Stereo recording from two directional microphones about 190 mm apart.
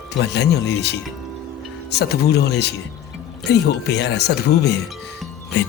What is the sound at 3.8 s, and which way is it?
Speech, 60° left (ahead or behind).